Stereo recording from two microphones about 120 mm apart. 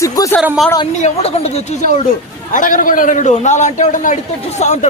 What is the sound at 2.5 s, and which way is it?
A man's voice, 90° left.